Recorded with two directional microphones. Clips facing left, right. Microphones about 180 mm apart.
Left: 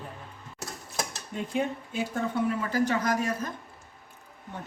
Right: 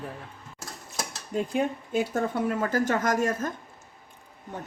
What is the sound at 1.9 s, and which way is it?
A woman's voice, 45° right (ahead or behind).